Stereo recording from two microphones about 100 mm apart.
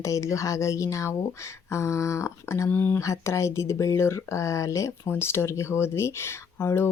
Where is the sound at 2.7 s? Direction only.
15° left (ahead or behind).